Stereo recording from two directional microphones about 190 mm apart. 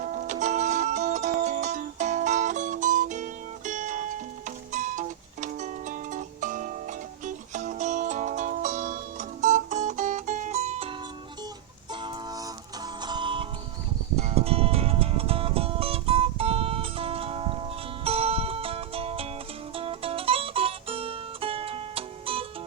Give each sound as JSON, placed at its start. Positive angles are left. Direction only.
{"t": 0.0, "sound": "music", "side_deg": -45}
{"t": 12.8, "sound": "music", "side_deg": -20}